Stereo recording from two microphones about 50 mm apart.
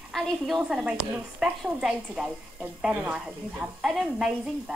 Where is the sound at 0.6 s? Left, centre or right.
Centre.